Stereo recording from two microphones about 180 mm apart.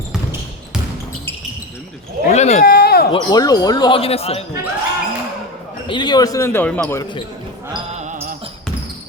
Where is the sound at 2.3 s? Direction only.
40° left (ahead or behind).